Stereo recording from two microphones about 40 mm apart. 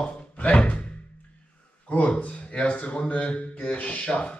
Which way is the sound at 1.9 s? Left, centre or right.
Left.